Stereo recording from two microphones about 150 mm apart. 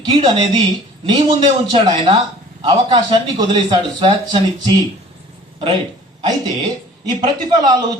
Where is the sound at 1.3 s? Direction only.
35° right (ahead or behind).